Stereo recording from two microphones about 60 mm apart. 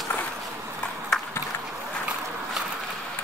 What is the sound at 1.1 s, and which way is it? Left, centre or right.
Run, centre.